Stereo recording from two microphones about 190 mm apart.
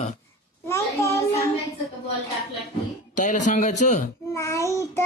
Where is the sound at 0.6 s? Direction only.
15° left (ahead or behind).